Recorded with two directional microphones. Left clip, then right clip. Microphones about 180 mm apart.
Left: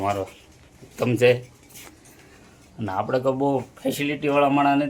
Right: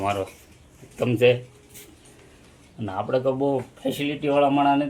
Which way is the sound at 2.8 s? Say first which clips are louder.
Left 1 dB; 5° left (ahead or behind).